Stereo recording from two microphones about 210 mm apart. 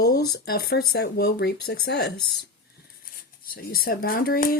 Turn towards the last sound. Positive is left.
turn(degrees=45)  # may be behind; listen again after turning